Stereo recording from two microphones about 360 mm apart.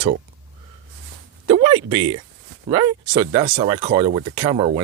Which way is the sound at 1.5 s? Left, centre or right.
Centre.